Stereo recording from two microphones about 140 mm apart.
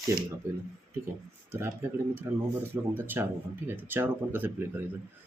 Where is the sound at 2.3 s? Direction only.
15° right (ahead or behind).